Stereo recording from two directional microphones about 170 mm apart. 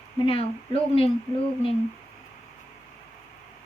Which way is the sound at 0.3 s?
35° left (ahead or behind).